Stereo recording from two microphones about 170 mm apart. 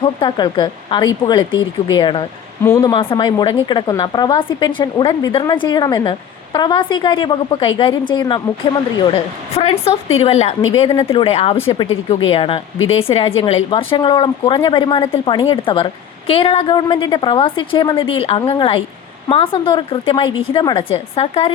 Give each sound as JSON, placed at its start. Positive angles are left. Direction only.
{"t": 0.0, "sound": "a woman's voice", "side_deg": 30}